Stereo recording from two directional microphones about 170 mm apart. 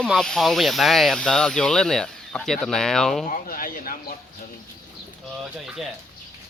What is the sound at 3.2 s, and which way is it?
Speech, 50° left (ahead or behind).